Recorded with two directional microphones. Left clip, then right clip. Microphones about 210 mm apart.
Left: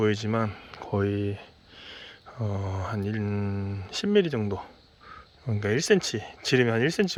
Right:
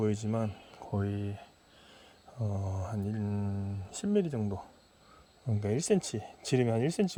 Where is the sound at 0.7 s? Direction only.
20° left (ahead or behind).